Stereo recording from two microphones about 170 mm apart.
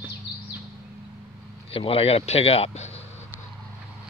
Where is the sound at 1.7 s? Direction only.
35° left (ahead or behind).